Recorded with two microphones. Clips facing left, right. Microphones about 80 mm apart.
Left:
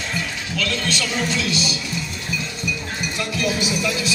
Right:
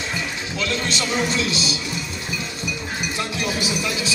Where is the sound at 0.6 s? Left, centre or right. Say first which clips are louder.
Even; right.